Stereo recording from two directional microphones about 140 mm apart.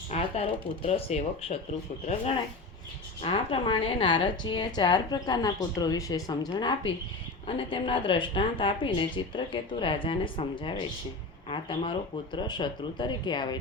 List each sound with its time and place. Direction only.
0.1 s speech: 45° left (ahead or behind)
3.2 s a woman's voice: 40° left (ahead or behind)